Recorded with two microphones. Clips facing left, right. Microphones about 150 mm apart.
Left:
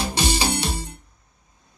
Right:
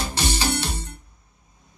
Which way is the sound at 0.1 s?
15° left (ahead or behind).